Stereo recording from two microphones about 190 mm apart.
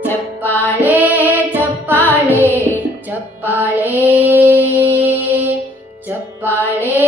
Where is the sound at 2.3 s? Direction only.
10° right (ahead or behind).